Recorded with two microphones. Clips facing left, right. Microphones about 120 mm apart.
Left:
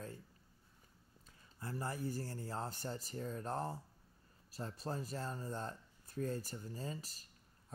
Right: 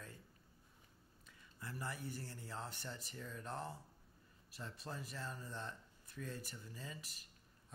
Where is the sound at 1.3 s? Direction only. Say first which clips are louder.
Left 5 dB; 40° left (ahead or behind).